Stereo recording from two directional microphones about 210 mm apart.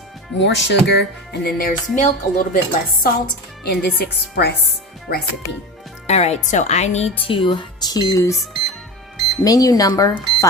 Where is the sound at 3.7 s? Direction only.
50° left (ahead or behind).